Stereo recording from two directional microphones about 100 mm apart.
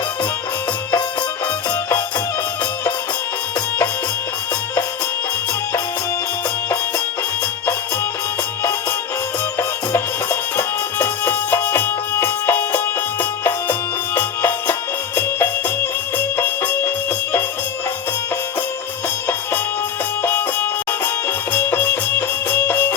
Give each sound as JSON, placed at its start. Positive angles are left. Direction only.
{"t": 9.6, "sound": "music", "side_deg": 25}
{"t": 20.2, "sound": "music", "side_deg": 20}